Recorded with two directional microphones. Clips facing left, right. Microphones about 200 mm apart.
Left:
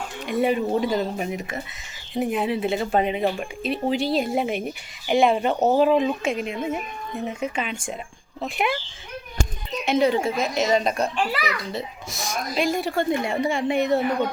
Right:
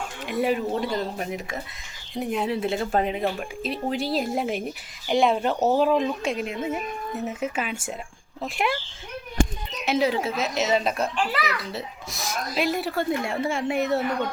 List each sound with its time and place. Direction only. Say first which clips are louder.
0.3 s speech: left 3 dB; centre (ahead or behind)
5.5 s speech: left 2 dB; 15° left (ahead or behind)
5.8 s speech: left 3 dB; 5° left (ahead or behind)
9.8 s speech: left 3 dB; 5° right (ahead or behind)